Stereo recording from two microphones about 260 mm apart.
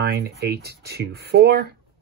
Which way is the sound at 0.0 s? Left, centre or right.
Right.